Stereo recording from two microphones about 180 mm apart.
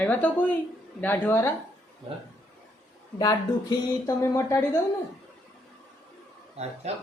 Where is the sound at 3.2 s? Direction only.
20° left (ahead or behind).